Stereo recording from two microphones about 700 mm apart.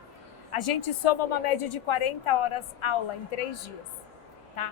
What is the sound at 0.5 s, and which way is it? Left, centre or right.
A woman's voice, left.